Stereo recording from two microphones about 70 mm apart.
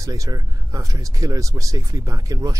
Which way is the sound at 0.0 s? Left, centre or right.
Right.